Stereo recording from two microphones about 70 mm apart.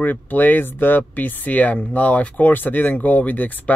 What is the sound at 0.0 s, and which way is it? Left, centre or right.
Speech, left.